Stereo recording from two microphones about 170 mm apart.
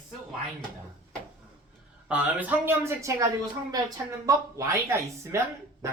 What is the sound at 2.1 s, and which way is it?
Speech, 10° right (ahead or behind).